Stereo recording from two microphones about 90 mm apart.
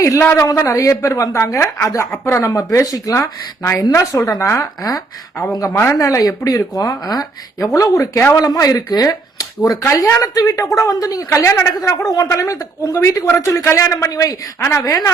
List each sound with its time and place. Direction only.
0.0 s speech: 30° left (ahead or behind)
4.8 s speech: 45° left (ahead or behind)
9.8 s speech: 30° left (ahead or behind)